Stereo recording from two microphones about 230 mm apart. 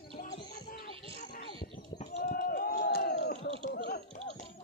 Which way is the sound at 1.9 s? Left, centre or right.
Left.